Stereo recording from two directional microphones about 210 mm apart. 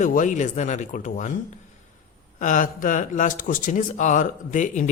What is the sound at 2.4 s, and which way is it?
A man's voice, 40° left (ahead or behind).